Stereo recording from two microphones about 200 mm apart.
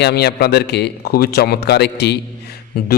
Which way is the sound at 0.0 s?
55° left (ahead or behind).